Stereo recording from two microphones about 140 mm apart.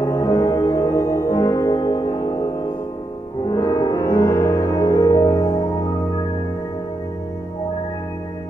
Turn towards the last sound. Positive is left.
turn(degrees=20)  # may be behind; listen again after turning